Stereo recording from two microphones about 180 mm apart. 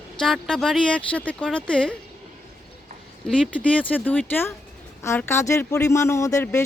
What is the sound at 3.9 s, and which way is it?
Speech, 10° left (ahead or behind).